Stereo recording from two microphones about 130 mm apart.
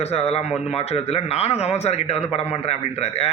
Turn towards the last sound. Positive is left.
turn(degrees=55)  # may be behind; listen again after turning